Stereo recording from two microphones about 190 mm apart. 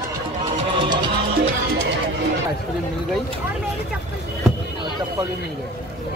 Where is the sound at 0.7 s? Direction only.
25° right (ahead or behind).